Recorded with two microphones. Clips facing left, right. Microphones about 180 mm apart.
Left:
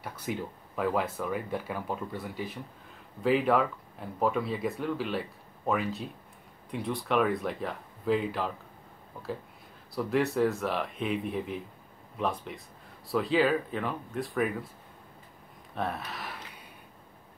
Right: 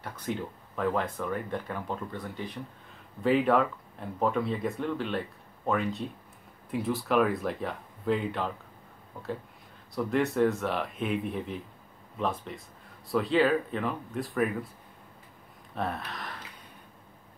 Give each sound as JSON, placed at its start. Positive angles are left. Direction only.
{"t": 0.0, "sound": "speech", "side_deg": 10}
{"t": 9.9, "sound": "speech", "side_deg": 0}
{"t": 15.7, "sound": "speech", "side_deg": 0}